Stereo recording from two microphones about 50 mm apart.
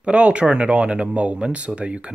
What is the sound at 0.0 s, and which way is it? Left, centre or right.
Speech, right.